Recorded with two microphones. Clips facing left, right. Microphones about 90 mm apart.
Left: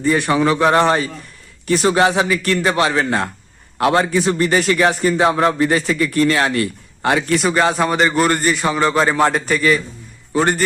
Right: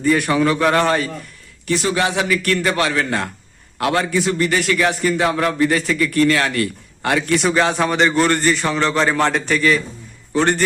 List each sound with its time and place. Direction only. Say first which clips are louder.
0.1 s a man's voice: left 1 dB; 20° left (ahead or behind)
1.6 s a man's voice: left 4 dB; 40° left (ahead or behind); by 7.3 s 20° left (ahead or behind)
7.3 s a man's voice: right 1 dB; centre (ahead or behind)